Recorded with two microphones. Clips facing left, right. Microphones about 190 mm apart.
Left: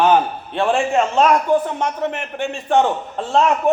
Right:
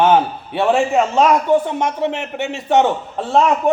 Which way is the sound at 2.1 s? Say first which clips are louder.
Right 2 dB; 75° right (ahead or behind).